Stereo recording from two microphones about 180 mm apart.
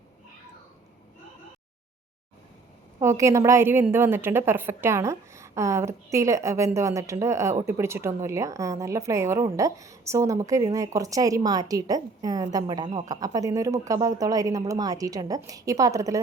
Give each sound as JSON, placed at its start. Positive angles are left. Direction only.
{"t": 3.0, "sound": "a woman's voice", "side_deg": -15}